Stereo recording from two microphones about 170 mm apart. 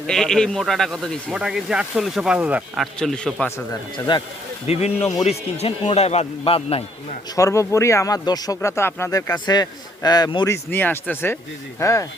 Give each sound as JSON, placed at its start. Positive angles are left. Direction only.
{"t": 0.1, "sound": "speech", "side_deg": 5}
{"t": 3.9, "sound": "a man's voice", "side_deg": 25}
{"t": 4.6, "sound": "a man's voice", "side_deg": 35}
{"t": 7.3, "sound": "speech", "side_deg": 20}